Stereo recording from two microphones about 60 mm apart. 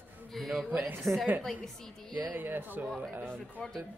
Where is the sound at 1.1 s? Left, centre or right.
Right.